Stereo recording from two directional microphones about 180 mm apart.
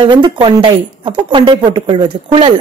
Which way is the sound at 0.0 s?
25° right (ahead or behind).